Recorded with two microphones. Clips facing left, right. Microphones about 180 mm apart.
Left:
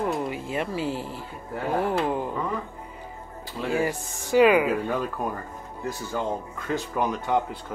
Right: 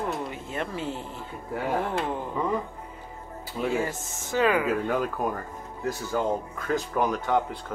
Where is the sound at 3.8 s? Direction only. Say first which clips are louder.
Left 3 dB; 15° left (ahead or behind).